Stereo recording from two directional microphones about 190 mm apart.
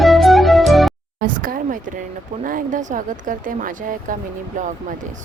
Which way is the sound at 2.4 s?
45° right (ahead or behind).